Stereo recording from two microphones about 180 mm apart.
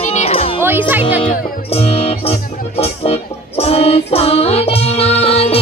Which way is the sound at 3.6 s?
35° left (ahead or behind).